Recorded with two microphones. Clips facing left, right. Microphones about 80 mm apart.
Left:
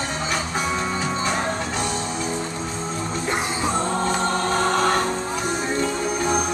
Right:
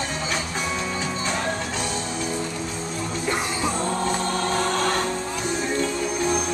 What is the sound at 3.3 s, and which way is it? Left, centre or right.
Music, left.